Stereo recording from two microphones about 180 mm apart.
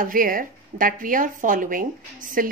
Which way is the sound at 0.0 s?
50° right (ahead or behind).